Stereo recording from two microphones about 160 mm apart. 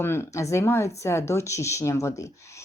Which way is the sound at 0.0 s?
15° left (ahead or behind).